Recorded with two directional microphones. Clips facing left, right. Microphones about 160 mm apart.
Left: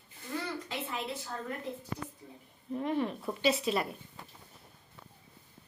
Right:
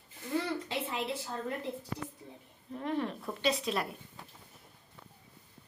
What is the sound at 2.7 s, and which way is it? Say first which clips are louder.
A woman's voice: left 2 dB; 5° left (ahead or behind).